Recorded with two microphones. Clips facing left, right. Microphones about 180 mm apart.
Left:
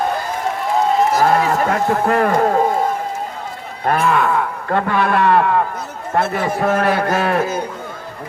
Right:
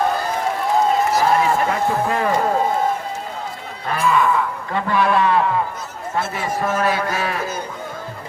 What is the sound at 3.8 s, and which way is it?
Music, 60° left (ahead or behind).